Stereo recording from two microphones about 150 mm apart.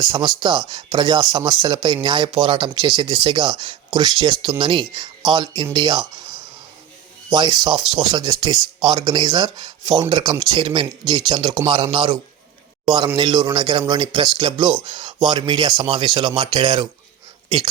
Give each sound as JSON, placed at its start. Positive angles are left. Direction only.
{"t": 0.0, "sound": "speech", "side_deg": -30}
{"t": 7.3, "sound": "speech", "side_deg": -30}
{"t": 13.1, "sound": "speech", "side_deg": -30}